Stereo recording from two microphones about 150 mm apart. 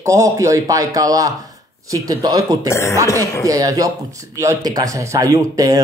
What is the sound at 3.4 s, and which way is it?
Speech, 25° right (ahead or behind).